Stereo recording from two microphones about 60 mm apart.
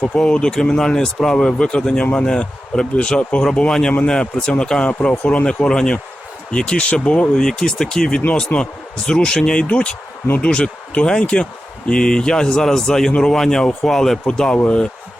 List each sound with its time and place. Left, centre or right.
0.1 s speech: centre
8.5 s speech: left
9.0 s speech: centre